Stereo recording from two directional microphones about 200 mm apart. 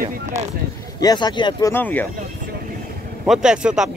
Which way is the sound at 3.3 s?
5° right (ahead or behind).